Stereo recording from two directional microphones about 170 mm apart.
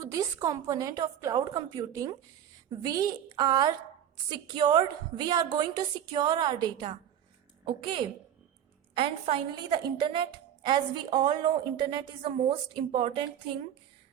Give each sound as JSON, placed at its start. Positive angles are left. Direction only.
{"t": 0.0, "sound": "a woman's voice", "side_deg": -20}